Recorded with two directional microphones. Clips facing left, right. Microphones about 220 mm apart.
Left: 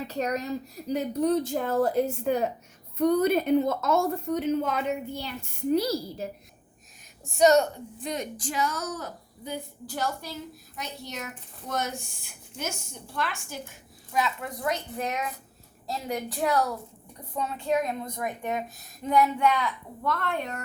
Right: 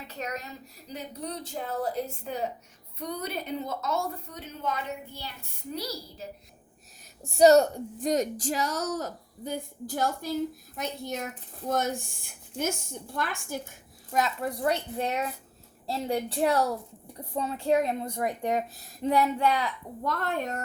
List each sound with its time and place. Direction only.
0.1 s speech: 40° left (ahead or behind)
7.3 s a woman's voice: 35° right (ahead or behind)